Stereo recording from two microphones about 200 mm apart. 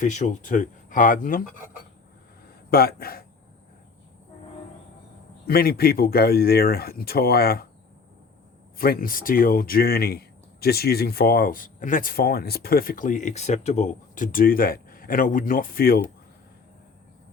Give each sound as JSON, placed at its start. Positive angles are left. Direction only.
{"t": 0.0, "sound": "speech", "side_deg": 40}
{"t": 2.6, "sound": "speech", "side_deg": 50}
{"t": 5.5, "sound": "speech", "side_deg": 50}
{"t": 8.8, "sound": "speech", "side_deg": 45}